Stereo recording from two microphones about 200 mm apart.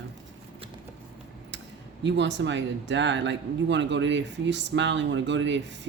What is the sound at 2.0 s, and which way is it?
Speech, 60° right (ahead or behind).